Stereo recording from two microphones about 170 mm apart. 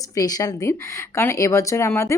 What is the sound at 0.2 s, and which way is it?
Speech, 20° left (ahead or behind).